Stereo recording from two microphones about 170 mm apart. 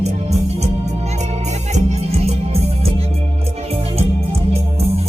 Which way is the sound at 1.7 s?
40° right (ahead or behind).